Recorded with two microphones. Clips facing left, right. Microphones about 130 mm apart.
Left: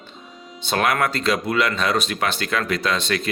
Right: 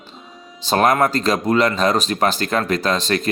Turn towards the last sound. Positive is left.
turn(degrees=-40)  # may be behind; listen again after turning